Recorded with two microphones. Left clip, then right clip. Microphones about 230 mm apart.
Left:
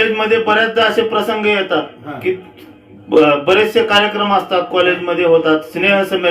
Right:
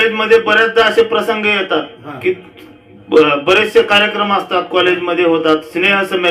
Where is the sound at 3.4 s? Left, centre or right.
Right.